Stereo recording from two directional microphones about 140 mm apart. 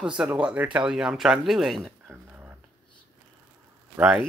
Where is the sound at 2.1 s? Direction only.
15° right (ahead or behind).